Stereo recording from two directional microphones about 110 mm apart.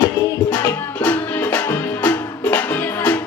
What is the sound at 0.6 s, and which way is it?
Music, 20° left (ahead or behind).